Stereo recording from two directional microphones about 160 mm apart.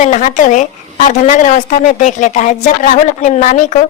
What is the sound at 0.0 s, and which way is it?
A woman's voice, 50° left (ahead or behind).